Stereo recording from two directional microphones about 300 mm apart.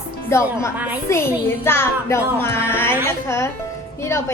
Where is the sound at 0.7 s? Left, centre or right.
Centre.